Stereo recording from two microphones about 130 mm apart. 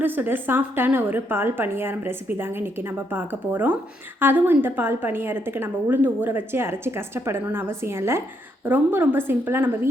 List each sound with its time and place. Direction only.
0.0 s a woman's voice: 15° right (ahead or behind)